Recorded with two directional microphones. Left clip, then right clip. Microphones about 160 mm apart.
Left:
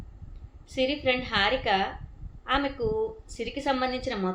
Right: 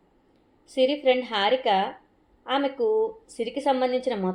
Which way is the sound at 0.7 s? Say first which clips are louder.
Right 5 dB; 50° right (ahead or behind).